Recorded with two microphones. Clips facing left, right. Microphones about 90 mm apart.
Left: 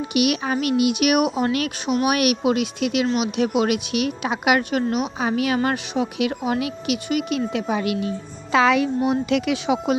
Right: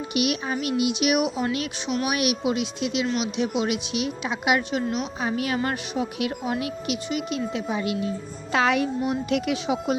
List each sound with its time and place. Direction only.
0.1 s a woman's voice: 75° left (ahead or behind)
0.8 s a woman's voice: 60° left (ahead or behind)
9.0 s speech: 90° left